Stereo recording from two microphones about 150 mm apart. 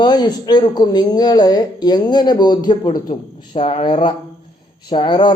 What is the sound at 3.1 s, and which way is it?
A woman's voice, 40° left (ahead or behind).